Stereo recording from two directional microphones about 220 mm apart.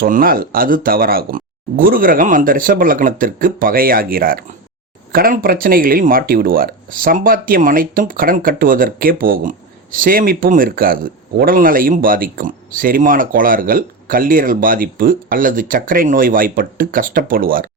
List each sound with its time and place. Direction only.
0.0 s speech: 40° right (ahead or behind)